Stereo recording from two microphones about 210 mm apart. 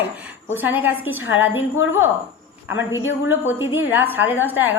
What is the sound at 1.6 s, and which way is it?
Speech, 70° left (ahead or behind).